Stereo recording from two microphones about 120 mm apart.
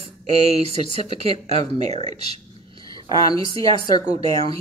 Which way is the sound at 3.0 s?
40° right (ahead or behind).